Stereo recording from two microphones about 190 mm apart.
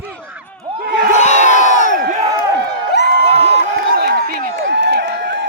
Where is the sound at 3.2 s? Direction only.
35° right (ahead or behind).